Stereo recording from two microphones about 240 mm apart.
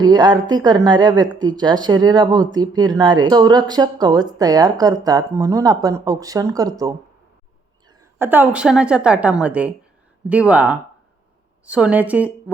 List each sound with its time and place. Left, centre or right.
0.0 s a woman's voice: centre